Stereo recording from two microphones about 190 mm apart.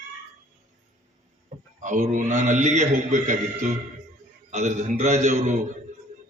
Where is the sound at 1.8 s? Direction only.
45° right (ahead or behind).